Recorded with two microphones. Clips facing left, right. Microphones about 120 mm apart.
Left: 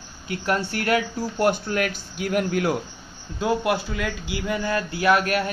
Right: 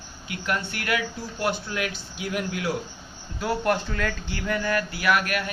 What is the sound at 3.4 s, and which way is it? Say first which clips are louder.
Speech: left 2 dB; 15° left (ahead or behind).